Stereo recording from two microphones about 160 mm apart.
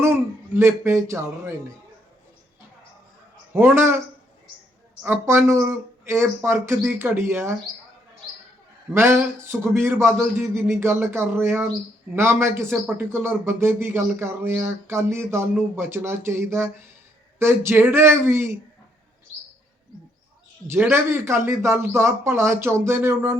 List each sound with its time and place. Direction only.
0.0 s speech: 15° right (ahead or behind)
3.5 s speech: 15° right (ahead or behind)
5.0 s speech: 15° right (ahead or behind)
8.9 s speech: 15° right (ahead or behind)
20.9 s speech: 15° right (ahead or behind)